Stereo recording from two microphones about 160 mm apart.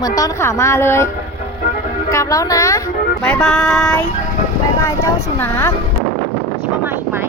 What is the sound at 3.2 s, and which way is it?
Speech, 5° left (ahead or behind).